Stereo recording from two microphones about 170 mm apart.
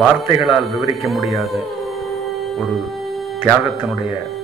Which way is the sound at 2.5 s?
Centre (ahead or behind).